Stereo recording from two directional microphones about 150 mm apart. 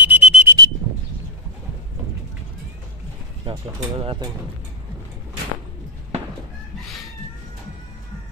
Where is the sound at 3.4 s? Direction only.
35° right (ahead or behind).